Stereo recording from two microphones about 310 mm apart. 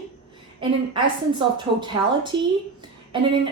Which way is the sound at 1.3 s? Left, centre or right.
Centre.